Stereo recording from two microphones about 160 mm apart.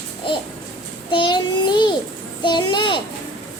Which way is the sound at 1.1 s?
30° left (ahead or behind).